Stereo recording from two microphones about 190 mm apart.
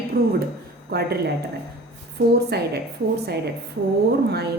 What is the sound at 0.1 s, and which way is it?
A woman's voice, 55° right (ahead or behind).